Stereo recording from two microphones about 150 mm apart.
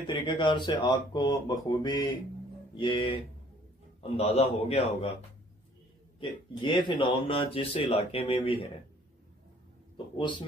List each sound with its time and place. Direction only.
0.0 s speech: 30° left (ahead or behind)
4.2 s a man's voice: 45° left (ahead or behind)
6.1 s speech: 35° left (ahead or behind)